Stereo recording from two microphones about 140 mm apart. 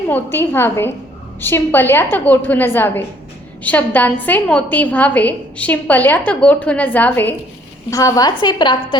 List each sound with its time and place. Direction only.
0.1 s a woman's voice: 15° left (ahead or behind)
7.9 s a woman's voice: 25° left (ahead or behind)